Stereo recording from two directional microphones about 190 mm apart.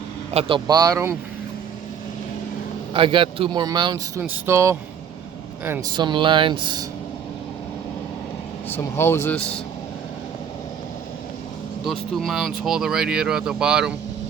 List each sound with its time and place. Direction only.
0.3 s a man's voice: 25° right (ahead or behind)
2.9 s a man's voice: 25° right (ahead or behind)
5.9 s a man's voice: 25° right (ahead or behind)
8.7 s speech: 10° left (ahead or behind)
11.9 s speech: centre (ahead or behind)